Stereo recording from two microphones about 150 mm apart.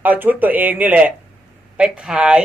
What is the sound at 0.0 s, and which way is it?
A man's voice, 10° right (ahead or behind).